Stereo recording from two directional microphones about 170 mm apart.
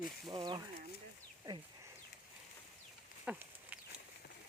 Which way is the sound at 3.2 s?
5° right (ahead or behind).